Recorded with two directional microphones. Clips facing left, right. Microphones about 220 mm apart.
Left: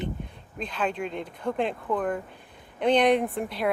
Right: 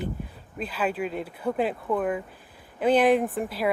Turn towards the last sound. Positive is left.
turn(degrees=-5)  # may be behind; listen again after turning